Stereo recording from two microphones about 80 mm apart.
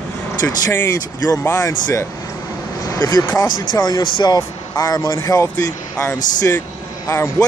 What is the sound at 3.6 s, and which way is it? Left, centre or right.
Speech, left.